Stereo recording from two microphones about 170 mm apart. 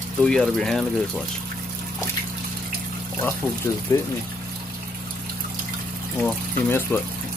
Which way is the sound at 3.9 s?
15° left (ahead or behind).